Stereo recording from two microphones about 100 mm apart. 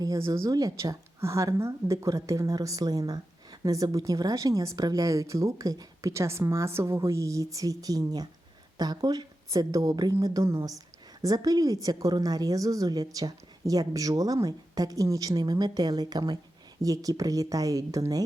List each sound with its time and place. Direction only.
0.0 s speech: 35° right (ahead or behind)